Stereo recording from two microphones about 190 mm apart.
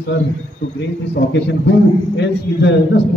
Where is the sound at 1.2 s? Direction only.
65° left (ahead or behind).